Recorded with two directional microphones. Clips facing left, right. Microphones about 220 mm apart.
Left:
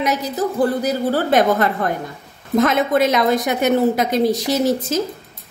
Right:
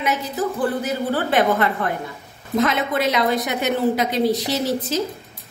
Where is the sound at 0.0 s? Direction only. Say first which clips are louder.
Left 3 dB; 40° left (ahead or behind).